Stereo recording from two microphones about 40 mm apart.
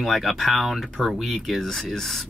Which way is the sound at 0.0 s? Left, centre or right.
Centre.